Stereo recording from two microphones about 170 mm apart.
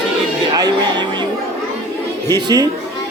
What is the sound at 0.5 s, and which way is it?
Speech, 25° right (ahead or behind).